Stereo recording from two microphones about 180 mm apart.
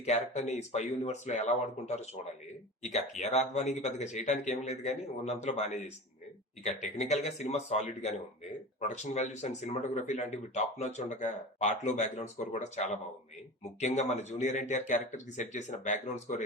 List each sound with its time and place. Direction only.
0.0 s speech: 40° left (ahead or behind)